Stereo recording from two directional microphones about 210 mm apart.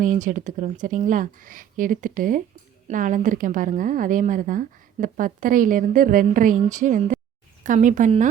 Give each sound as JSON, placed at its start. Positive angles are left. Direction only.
{"t": 0.0, "sound": "a woman's voice", "side_deg": -40}